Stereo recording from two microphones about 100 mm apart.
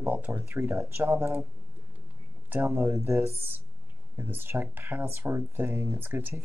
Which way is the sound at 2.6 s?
30° right (ahead or behind).